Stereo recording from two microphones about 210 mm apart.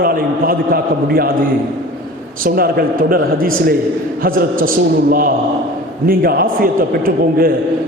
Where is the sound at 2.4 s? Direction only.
45° right (ahead or behind).